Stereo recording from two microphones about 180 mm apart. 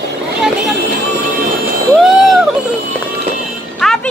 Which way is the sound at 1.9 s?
Centre (ahead or behind).